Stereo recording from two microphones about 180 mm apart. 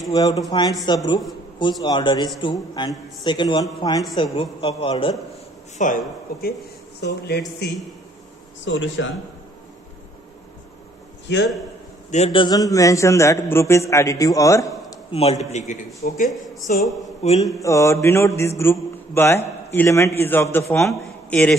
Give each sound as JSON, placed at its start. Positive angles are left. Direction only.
{"t": 0.1, "sound": "a man's voice", "side_deg": 20}
{"t": 5.8, "sound": "speech", "side_deg": 45}
{"t": 7.0, "sound": "speech", "side_deg": 65}
{"t": 8.6, "sound": "speech", "side_deg": 90}
{"t": 11.3, "sound": "speech", "side_deg": 75}
{"t": 12.1, "sound": "a man's voice", "side_deg": 35}
{"t": 15.0, "sound": "a man's voice", "side_deg": 35}
{"t": 17.6, "sound": "a man's voice", "side_deg": 15}